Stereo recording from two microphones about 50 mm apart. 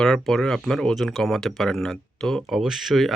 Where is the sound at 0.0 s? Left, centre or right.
Centre.